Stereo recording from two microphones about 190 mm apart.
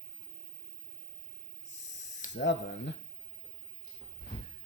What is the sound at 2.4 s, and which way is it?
Speech, 65° left (ahead or behind).